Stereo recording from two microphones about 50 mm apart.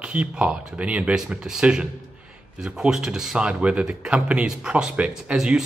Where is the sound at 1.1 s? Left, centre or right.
Centre.